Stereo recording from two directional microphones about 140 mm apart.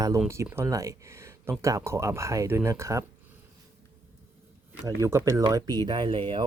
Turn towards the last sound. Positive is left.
turn(degrees=-35)  # may be behind; listen again after turning